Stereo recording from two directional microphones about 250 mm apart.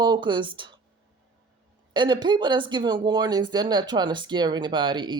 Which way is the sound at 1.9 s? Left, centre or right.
Centre.